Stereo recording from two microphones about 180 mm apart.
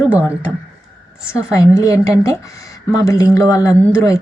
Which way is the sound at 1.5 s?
20° left (ahead or behind).